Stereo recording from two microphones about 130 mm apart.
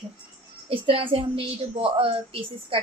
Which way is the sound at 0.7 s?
45° right (ahead or behind).